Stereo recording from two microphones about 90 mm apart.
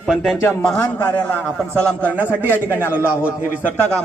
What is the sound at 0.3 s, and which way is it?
A man's voice, 25° left (ahead or behind).